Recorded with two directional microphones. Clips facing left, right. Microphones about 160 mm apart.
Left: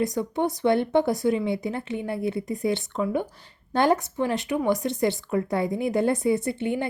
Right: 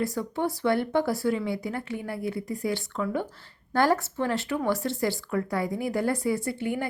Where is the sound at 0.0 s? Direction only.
20° left (ahead or behind).